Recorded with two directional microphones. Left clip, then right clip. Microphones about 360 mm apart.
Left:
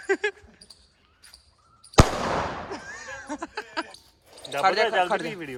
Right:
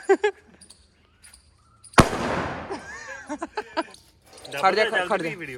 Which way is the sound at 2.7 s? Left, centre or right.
Centre.